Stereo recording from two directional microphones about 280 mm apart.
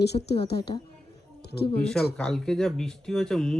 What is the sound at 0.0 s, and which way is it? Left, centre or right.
Speech, left.